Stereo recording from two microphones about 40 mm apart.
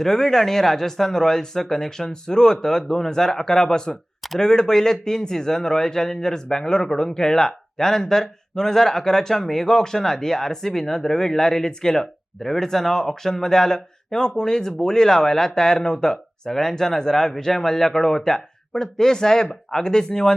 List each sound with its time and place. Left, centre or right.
0.0 s speech: centre